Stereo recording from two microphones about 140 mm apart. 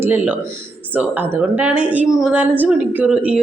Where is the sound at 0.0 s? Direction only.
15° right (ahead or behind).